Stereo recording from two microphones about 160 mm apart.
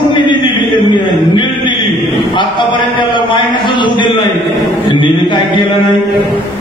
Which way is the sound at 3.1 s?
30° left (ahead or behind).